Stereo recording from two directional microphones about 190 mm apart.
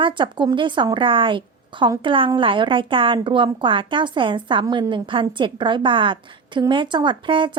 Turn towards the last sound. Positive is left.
turn(degrees=-25)  # may be behind; listen again after turning